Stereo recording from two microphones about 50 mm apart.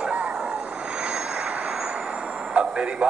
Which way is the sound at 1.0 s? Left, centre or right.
Right.